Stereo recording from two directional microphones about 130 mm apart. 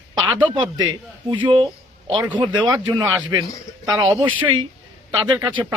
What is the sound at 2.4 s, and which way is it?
Speech, 35° right (ahead or behind).